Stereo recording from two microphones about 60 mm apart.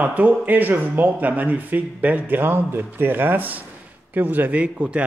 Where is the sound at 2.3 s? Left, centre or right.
Right.